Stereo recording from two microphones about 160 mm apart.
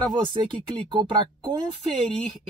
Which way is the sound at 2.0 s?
5° left (ahead or behind).